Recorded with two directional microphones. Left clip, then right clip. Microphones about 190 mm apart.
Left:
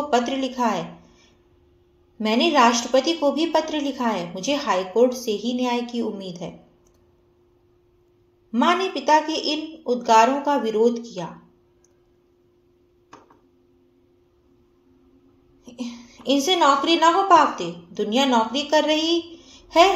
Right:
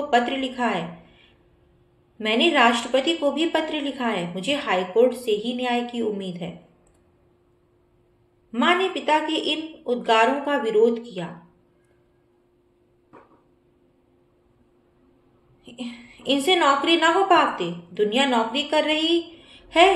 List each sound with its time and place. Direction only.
0.1 s a woman's voice: 40° left (ahead or behind)
2.1 s a woman's voice: 40° left (ahead or behind)
8.5 s a woman's voice: 40° left (ahead or behind)
15.6 s a sound: 40° left (ahead or behind)
16.4 s a woman's voice: 45° left (ahead or behind)
19.0 s a sound: 40° left (ahead or behind)